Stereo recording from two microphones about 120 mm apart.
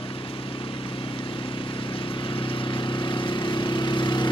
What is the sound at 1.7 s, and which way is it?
Vehicle, 45° left (ahead or behind).